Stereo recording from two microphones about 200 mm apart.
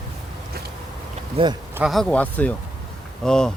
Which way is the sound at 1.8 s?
Centre (ahead or behind).